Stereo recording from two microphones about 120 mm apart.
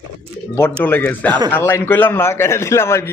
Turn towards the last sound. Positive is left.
turn(degrees=20)  # may be behind; listen again after turning